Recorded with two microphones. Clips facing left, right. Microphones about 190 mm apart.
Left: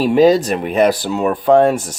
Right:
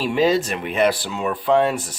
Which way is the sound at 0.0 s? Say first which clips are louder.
Left 7 dB; 40° left (ahead or behind).